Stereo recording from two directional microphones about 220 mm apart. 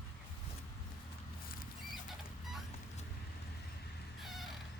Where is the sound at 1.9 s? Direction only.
Centre (ahead or behind).